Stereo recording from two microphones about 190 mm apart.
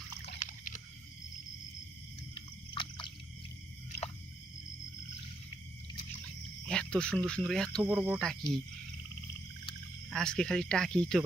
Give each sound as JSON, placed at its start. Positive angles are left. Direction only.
{"t": 0.3, "sound": "a sound", "side_deg": 40}
{"t": 2.3, "sound": "a sound", "side_deg": 25}
{"t": 6.7, "sound": "cricket", "side_deg": 5}
{"t": 7.3, "sound": "speech", "side_deg": 5}
{"t": 7.9, "sound": "speech", "side_deg": -10}
{"t": 8.2, "sound": "speech", "side_deg": 0}
{"t": 10.1, "sound": "speech", "side_deg": 5}